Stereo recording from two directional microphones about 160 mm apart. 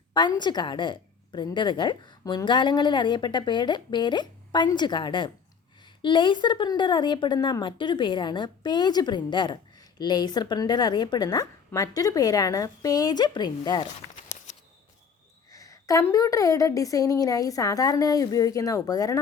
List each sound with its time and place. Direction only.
0.3 s a woman's voice: 25° left (ahead or behind)
15.4 s a woman's voice: 20° left (ahead or behind)